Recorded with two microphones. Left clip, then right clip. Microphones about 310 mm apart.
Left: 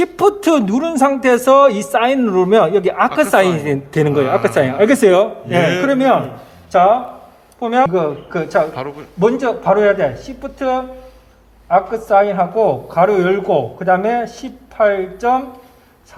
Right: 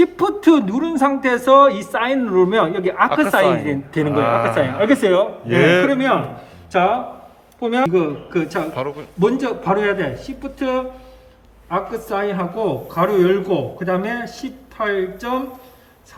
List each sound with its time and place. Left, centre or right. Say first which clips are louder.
0.0 s speech: left 2 dB; left
4.2 s speech: right 1 dB; centre
4.4 s speech: left 4 dB; left
5.6 s speech: right 5 dB; centre
5.9 s speech: left 4 dB; left
7.6 s speech: left 3 dB; centre
8.7 s speech: right 1 dB; centre
9.2 s speech: left 4 dB; centre